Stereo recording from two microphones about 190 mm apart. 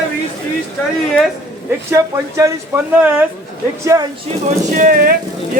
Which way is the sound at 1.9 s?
15° right (ahead or behind).